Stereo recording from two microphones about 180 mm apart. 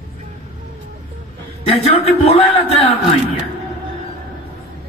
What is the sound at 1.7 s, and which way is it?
Speech, 35° left (ahead or behind).